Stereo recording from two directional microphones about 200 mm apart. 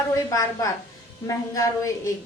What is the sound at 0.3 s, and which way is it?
A woman's voice, 15° left (ahead or behind).